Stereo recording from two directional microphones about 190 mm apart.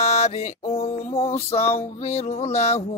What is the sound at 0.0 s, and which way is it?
Mantra, 35° left (ahead or behind).